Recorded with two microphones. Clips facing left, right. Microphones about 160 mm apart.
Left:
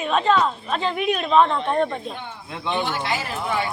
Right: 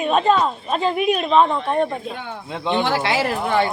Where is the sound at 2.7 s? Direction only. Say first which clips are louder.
Right 5 dB; 85° right.